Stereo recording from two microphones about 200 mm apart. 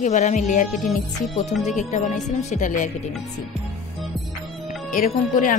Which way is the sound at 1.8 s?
35° left (ahead or behind).